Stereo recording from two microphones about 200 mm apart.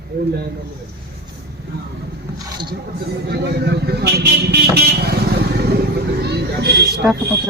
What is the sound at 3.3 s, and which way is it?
Speech, 55° right (ahead or behind).